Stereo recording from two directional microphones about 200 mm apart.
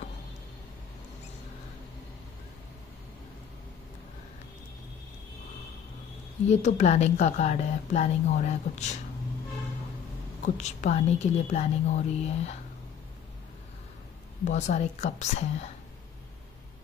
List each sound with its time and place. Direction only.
6.4 s speech: 35° left (ahead or behind)
10.4 s speech: 35° left (ahead or behind)
14.4 s speech: 35° left (ahead or behind)